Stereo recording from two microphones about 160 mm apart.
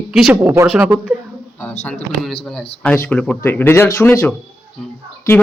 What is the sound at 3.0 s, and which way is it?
Speech, 5° left (ahead or behind).